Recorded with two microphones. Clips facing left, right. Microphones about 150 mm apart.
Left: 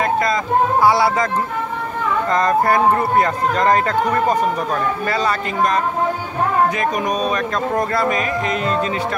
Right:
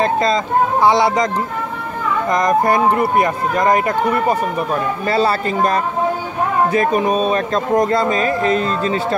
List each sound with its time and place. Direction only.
0.0 s a sound: 25° right (ahead or behind)
0.8 s speech: 20° right (ahead or behind)
5.0 s speech: 30° right (ahead or behind)